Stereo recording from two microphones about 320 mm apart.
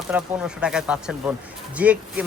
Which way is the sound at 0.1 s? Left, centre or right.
Centre.